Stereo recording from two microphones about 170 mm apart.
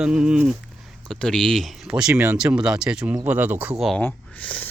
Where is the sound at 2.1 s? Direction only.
15° right (ahead or behind).